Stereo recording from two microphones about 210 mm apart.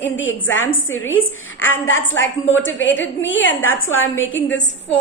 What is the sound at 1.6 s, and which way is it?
A woman's voice, 65° left (ahead or behind).